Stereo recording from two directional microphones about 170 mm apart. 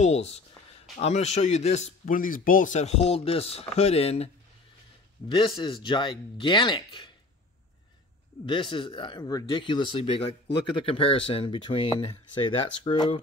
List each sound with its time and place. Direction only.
0.0 s speech: 40° left (ahead or behind)
5.6 s speech: 25° left (ahead or behind)
8.5 s speech: 30° left (ahead or behind)